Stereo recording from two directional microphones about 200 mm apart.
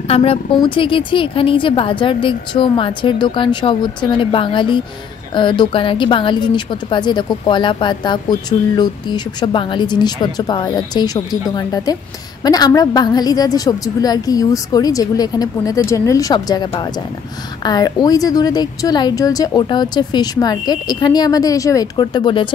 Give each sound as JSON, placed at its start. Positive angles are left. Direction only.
{"t": 0.1, "sound": "a woman's voice", "side_deg": 30}